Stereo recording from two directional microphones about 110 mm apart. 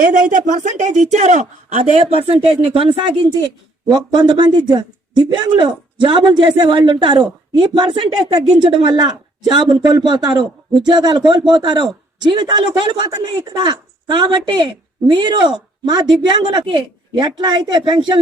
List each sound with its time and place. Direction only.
0.7 s speech: 90° right; by 3.0 s 55° right (ahead or behind)
3.8 s speech: 40° right (ahead or behind)